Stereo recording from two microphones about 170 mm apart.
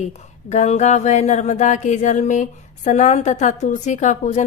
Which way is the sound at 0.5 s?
40° left (ahead or behind).